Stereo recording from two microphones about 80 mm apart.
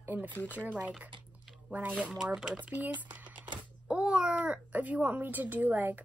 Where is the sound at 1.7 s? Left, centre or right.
Centre.